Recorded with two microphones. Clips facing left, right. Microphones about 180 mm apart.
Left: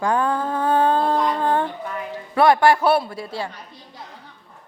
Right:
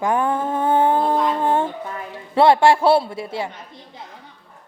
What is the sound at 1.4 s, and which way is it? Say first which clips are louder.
A man's voice: right 1 dB; 25° right (ahead or behind).